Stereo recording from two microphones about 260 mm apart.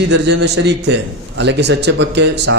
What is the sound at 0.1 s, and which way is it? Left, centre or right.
A man's voice, right.